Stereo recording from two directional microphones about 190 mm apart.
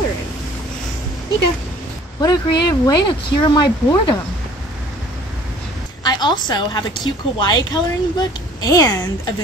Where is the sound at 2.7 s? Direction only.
20° left (ahead or behind).